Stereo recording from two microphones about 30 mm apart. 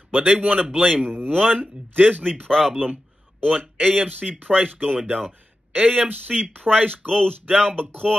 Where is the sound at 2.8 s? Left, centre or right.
Right.